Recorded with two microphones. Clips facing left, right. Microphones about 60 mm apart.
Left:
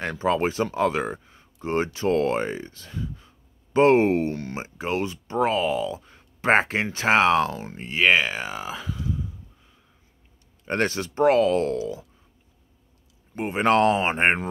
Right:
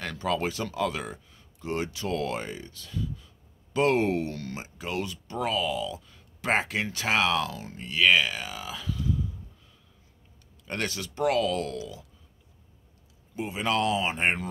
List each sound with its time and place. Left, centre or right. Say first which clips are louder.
0.0 s speech: left 6 dB; left
10.6 s speech: left 8 dB; left
13.4 s speech: left 8 dB; left